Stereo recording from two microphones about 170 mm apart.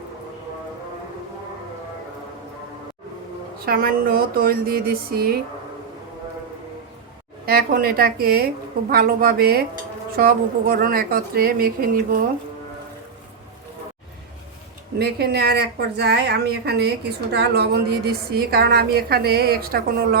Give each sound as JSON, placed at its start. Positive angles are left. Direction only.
{"t": 3.7, "sound": "a woman's voice", "side_deg": -60}
{"t": 7.4, "sound": "a woman's voice", "side_deg": -60}
{"t": 14.9, "sound": "a woman's voice", "side_deg": -70}